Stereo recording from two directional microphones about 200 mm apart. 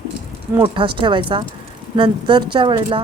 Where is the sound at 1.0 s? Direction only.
25° right (ahead or behind).